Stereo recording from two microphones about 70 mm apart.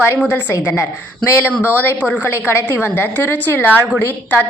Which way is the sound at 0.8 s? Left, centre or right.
Left.